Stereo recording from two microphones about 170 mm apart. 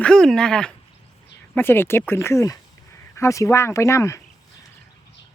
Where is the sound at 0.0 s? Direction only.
5° left (ahead or behind).